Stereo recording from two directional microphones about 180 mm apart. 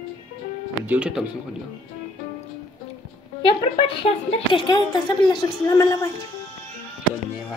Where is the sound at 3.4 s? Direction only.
30° left (ahead or behind).